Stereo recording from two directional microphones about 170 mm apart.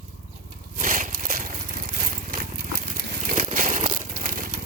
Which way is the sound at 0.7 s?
55° right (ahead or behind).